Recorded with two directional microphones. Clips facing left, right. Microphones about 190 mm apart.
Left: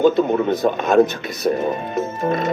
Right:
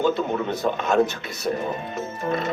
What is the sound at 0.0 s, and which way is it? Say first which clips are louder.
Speech: left 7 dB; 15° left (ahead or behind).